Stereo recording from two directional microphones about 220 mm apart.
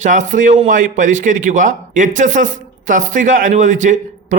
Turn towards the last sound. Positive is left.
turn(degrees=-35)  # may be behind; listen again after turning